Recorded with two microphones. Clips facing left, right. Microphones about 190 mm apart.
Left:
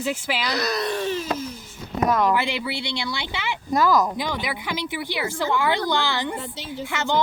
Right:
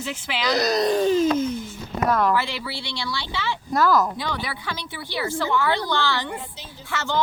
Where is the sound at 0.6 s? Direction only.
40° right (ahead or behind).